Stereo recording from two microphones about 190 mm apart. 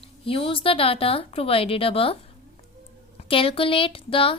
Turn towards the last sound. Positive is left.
turn(degrees=30)  # may be behind; listen again after turning